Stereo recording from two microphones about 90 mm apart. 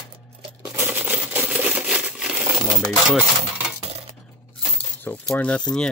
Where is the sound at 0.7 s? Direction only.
20° right (ahead or behind).